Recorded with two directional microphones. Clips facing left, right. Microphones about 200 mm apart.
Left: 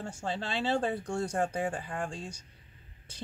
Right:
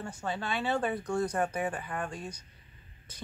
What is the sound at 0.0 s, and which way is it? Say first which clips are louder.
Speech: even; 25° left (ahead or behind).